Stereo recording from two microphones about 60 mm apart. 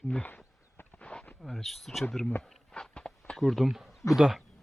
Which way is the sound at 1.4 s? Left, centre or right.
Centre.